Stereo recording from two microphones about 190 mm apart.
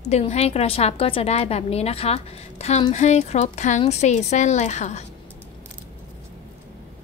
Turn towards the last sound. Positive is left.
turn(degrees=35)  # may be behind; listen again after turning